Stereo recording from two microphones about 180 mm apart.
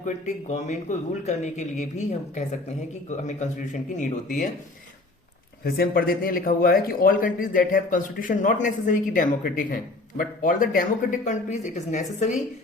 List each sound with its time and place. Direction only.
0.0 s speech: 40° left (ahead or behind)
5.6 s a man's voice: 55° left (ahead or behind); by 12.4 s 40° left (ahead or behind)